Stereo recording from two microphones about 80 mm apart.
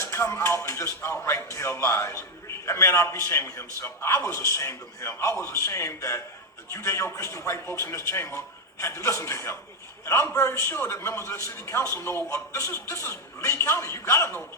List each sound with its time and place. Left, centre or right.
0.0 s a man's voice: left